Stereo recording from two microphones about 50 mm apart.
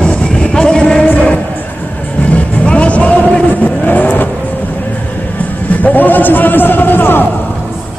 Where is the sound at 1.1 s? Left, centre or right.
Left.